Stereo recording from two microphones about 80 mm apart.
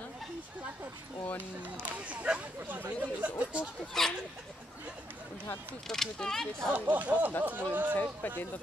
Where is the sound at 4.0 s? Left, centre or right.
Centre.